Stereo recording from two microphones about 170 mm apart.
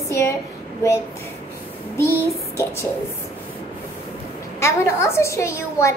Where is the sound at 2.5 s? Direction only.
15° left (ahead or behind).